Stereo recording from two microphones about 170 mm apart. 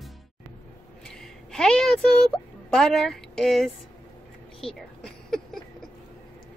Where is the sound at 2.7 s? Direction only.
5° left (ahead or behind).